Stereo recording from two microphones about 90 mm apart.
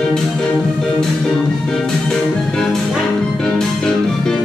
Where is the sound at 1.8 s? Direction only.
5° left (ahead or behind).